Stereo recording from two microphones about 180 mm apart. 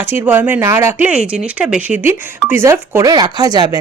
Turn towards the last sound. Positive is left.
turn(degrees=-20)  # may be behind; listen again after turning